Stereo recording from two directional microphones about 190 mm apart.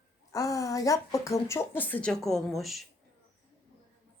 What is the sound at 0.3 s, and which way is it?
A woman's voice, 15° left (ahead or behind).